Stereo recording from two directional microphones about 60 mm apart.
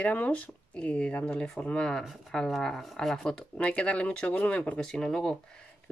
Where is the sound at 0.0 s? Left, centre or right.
Left.